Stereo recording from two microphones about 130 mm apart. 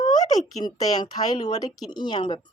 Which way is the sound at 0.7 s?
35° left (ahead or behind).